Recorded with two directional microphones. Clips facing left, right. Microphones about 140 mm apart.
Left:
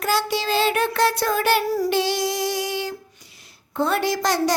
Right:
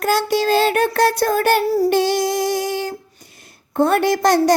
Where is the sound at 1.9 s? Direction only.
50° right (ahead or behind).